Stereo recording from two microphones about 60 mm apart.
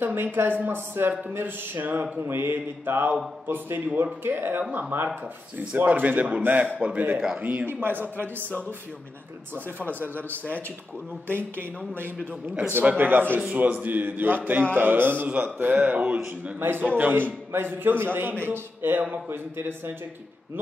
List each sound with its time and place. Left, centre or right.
0.0 s a man's voice: right
12.8 s a man's voice: right
16.5 s a man's voice: right